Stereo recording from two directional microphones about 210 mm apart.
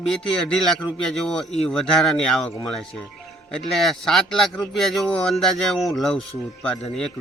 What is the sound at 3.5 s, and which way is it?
A man's voice, centre (ahead or behind).